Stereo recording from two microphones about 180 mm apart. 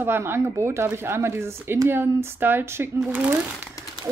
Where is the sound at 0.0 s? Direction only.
15° right (ahead or behind).